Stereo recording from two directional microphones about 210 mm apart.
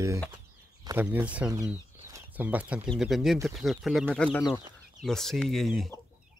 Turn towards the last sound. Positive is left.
turn(degrees=0)  # may be behind; listen again after turning